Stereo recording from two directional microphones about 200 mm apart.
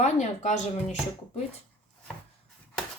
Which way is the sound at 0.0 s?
35° left (ahead or behind).